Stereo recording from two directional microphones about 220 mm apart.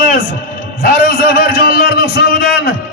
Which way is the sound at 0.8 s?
40° left (ahead or behind).